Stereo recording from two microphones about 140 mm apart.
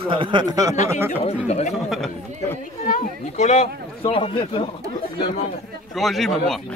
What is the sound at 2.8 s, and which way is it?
Speech, 65° left (ahead or behind).